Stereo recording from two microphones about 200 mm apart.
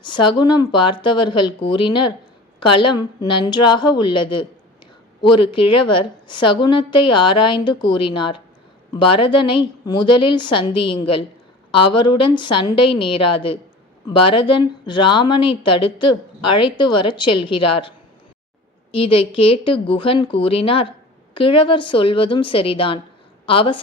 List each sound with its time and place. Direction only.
0.0 s a woman's voice: 25° left (ahead or behind)